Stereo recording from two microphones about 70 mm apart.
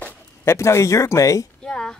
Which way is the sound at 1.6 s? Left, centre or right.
Centre.